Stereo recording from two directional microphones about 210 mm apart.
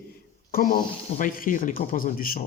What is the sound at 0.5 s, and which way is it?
Speech, 40° left (ahead or behind).